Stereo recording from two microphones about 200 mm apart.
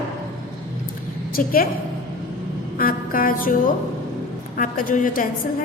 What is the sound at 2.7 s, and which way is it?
Music, 45° left (ahead or behind).